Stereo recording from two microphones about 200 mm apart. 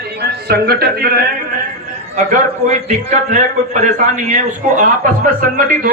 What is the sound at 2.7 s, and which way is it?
A man's voice, 35° right (ahead or behind).